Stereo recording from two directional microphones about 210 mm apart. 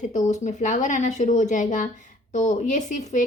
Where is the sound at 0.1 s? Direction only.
35° left (ahead or behind).